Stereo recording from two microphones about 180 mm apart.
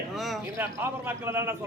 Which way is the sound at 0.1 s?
Centre (ahead or behind).